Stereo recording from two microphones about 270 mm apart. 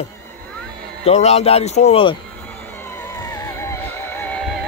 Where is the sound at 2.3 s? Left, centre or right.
Centre.